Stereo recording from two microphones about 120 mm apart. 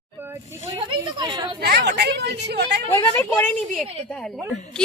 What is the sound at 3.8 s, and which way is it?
Music, 5° left (ahead or behind).